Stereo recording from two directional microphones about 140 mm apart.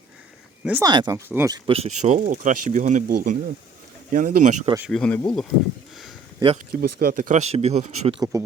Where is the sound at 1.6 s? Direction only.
45° right (ahead or behind); by 4.5 s 70° right (ahead or behind).